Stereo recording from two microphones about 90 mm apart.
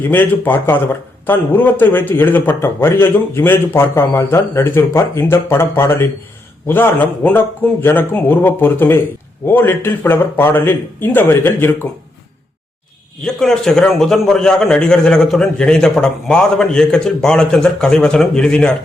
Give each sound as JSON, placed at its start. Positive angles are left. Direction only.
{"t": 0.1, "sound": "speech", "side_deg": 20}
{"t": 13.2, "sound": "a man's voice", "side_deg": 5}